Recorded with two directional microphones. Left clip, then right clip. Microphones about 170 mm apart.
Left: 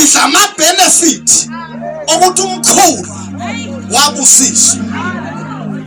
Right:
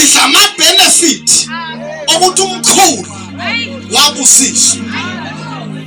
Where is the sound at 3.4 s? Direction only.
25° left (ahead or behind).